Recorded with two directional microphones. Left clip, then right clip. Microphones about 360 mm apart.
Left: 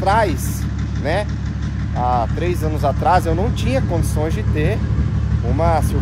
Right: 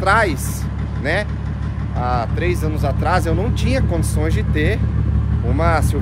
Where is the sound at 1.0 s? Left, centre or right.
Centre.